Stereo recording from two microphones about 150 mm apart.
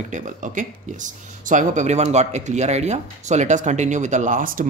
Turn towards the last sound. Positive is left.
turn(degrees=-60)  # may be behind; listen again after turning